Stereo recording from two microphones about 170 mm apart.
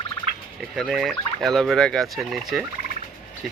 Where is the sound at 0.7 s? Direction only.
Centre (ahead or behind).